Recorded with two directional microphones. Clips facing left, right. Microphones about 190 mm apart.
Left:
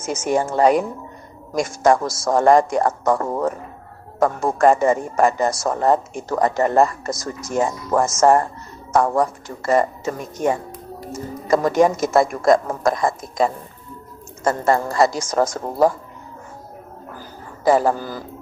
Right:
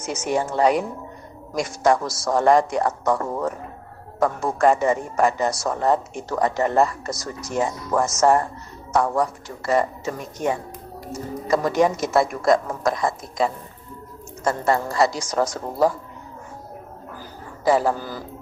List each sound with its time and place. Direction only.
0.0 s speech: 50° left (ahead or behind)
17.7 s speech: 45° left (ahead or behind)